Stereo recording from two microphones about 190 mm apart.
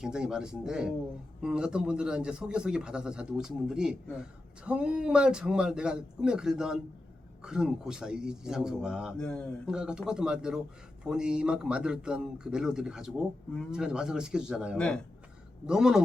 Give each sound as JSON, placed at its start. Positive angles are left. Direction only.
{"t": 0.0, "sound": "speech", "side_deg": -5}